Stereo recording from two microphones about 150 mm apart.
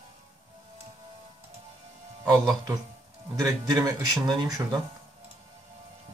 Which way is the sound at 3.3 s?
25° right (ahead or behind).